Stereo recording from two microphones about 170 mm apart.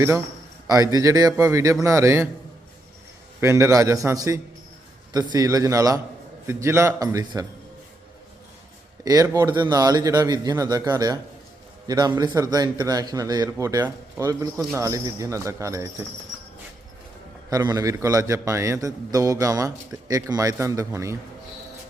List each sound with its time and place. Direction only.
0.7 s speech: 20° right (ahead or behind)
3.4 s speech: 15° right (ahead or behind)
9.0 s speech: 20° right (ahead or behind)
17.5 s speech: 25° right (ahead or behind)